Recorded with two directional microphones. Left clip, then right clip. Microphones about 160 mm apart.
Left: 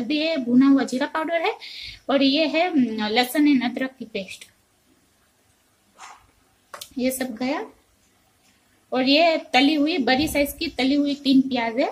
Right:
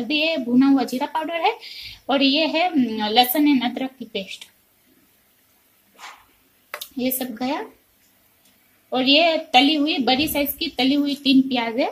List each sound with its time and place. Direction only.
0.0 s speech: 10° left (ahead or behind)
7.0 s speech: 15° left (ahead or behind)
8.9 s speech: 10° left (ahead or behind)